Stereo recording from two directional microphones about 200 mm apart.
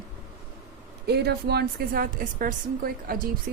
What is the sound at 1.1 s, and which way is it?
A woman's voice, 55° right (ahead or behind).